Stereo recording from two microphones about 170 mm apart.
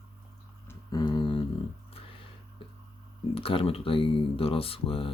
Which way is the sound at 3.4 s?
30° left (ahead or behind).